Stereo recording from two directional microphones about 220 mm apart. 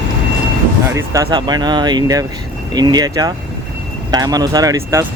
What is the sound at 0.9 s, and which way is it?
Speech, 15° right (ahead or behind).